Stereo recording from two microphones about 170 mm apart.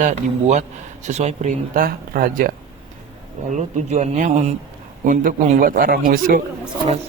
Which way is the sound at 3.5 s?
45° right (ahead or behind).